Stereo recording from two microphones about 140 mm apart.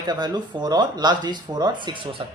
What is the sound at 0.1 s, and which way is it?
Speech, 30° right (ahead or behind).